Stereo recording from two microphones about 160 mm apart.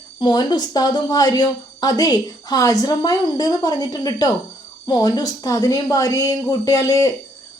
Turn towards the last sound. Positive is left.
turn(degrees=20)  # may be behind; listen again after turning